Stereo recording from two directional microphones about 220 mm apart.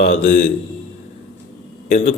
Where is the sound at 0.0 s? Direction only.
35° left (ahead or behind).